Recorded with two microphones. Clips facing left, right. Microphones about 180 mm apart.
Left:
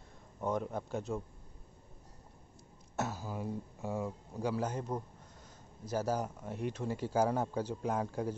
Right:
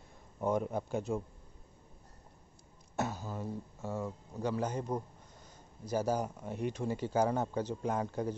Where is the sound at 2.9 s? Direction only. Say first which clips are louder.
Right 1 dB; 5° left (ahead or behind).